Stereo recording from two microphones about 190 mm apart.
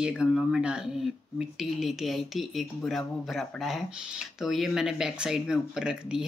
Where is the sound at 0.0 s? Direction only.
5° right (ahead or behind).